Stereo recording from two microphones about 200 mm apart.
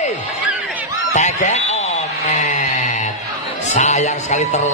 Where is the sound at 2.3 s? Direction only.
35° left (ahead or behind).